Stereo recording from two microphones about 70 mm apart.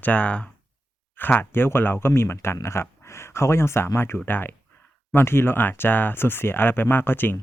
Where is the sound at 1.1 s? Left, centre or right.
Left.